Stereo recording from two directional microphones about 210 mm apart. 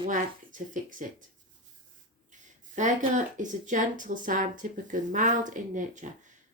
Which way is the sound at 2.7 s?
35° right (ahead or behind).